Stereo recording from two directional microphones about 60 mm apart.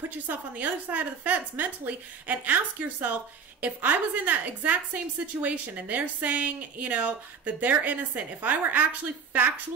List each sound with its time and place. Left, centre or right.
0.1 s a woman's voice: right